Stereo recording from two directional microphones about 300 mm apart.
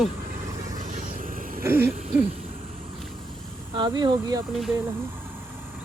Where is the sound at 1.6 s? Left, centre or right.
Centre.